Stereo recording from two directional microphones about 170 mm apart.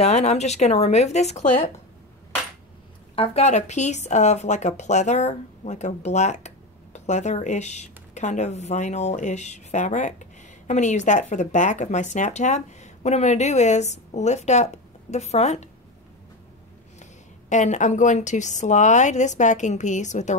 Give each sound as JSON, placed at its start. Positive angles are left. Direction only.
{"t": 0.0, "sound": "speech", "side_deg": 40}
{"t": 3.2, "sound": "speech", "side_deg": 40}
{"t": 17.0, "sound": "speech", "side_deg": 45}